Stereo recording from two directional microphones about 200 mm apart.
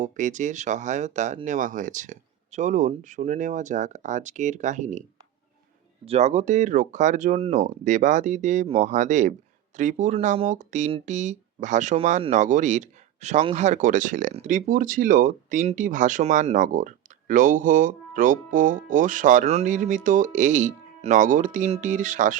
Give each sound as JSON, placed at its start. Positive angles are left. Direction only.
{"t": 0.0, "sound": "speech", "side_deg": -40}
{"t": 6.1, "sound": "speech", "side_deg": -35}